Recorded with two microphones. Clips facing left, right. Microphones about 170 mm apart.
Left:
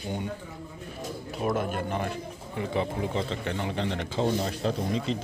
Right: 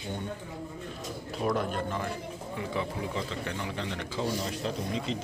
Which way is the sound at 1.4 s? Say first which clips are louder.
Left 1 dB; 5° left (ahead or behind).